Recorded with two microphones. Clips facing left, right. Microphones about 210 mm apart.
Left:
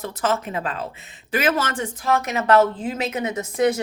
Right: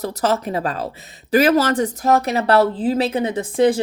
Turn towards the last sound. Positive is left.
turn(degrees=-30)  # may be behind; listen again after turning